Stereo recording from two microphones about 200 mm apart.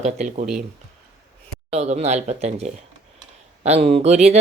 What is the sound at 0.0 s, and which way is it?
Speech, 35° right (ahead or behind).